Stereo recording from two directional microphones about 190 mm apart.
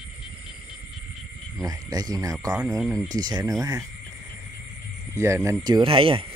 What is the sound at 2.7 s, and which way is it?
Speech, 15° right (ahead or behind).